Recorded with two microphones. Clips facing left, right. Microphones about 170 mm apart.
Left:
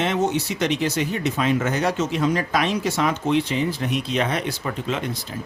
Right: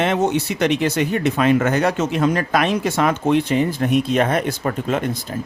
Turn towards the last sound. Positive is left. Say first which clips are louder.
# right 5 dB
turn(degrees=-50)  # may be behind; listen again after turning